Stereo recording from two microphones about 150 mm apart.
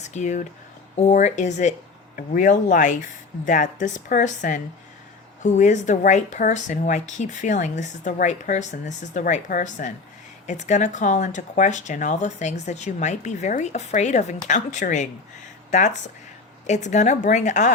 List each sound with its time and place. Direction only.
0.0 s speech: 50° left (ahead or behind)
2.1 s speech: 65° left (ahead or behind)